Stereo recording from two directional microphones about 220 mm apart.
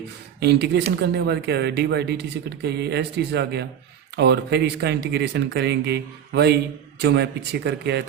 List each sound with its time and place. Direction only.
0.3 s speech: 50° right (ahead or behind)